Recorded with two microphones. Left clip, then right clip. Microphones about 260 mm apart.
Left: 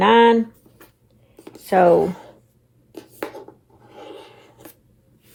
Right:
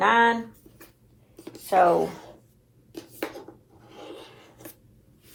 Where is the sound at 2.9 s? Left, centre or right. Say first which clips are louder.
Left 2 dB; centre.